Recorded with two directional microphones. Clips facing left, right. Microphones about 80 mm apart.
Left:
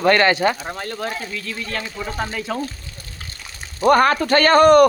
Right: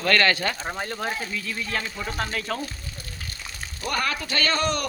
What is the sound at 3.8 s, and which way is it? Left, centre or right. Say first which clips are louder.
Speech: left 13 dB; left.